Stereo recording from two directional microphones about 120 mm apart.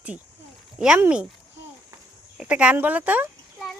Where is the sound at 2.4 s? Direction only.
10° right (ahead or behind).